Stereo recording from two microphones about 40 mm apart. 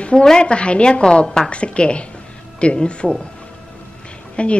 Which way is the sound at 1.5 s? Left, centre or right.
Left.